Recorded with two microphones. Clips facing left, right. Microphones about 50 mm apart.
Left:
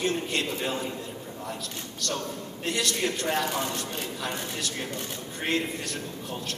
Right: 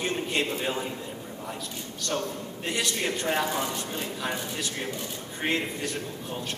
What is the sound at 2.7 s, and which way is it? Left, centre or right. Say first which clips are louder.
Speech: left 1 dB; centre.